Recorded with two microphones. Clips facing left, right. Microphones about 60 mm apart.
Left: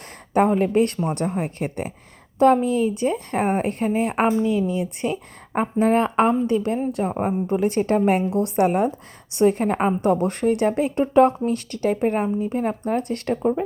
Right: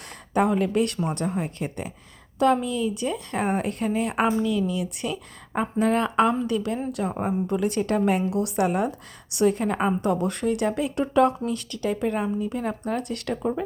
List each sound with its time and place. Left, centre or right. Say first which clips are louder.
0.3 s a woman's voice: left 4 dB; left